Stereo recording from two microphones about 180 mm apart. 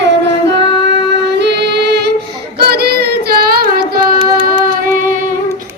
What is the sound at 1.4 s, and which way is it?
Music, 70° right (ahead or behind).